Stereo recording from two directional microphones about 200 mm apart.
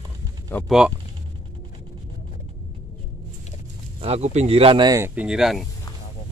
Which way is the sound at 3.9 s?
30° right (ahead or behind).